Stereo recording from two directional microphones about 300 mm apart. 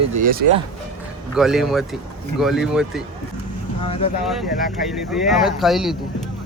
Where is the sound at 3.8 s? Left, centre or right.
Centre.